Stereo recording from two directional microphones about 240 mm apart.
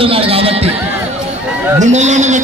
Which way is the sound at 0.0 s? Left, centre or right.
Right.